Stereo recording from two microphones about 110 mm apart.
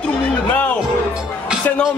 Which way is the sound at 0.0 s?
15° left (ahead or behind).